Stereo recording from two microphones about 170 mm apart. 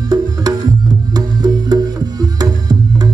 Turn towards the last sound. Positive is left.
turn(degrees=-20)  # may be behind; listen again after turning